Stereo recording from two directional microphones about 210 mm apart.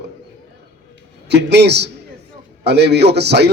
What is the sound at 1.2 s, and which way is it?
A man's voice, 55° right (ahead or behind).